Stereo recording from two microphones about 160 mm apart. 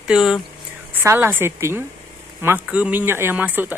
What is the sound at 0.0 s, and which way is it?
Speech, 5° right (ahead or behind).